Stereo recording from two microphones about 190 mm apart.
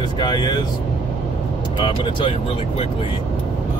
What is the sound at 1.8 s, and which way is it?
Speech, 25° left (ahead or behind).